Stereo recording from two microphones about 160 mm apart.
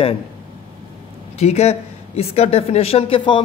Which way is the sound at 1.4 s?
40° left (ahead or behind).